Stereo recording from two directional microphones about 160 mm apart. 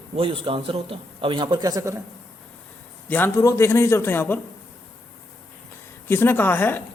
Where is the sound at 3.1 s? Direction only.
15° left (ahead or behind).